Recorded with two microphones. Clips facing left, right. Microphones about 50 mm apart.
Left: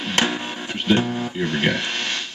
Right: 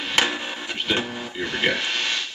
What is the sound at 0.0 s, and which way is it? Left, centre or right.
Music, centre.